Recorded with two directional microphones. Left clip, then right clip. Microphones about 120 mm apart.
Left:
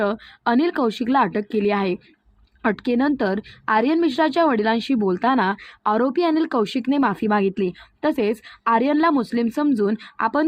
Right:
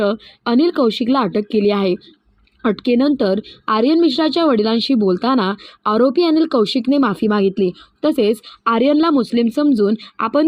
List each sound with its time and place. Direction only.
0.0 s a woman's voice: 40° right (ahead or behind)